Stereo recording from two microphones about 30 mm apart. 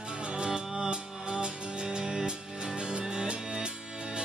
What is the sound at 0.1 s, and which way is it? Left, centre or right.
Music, right.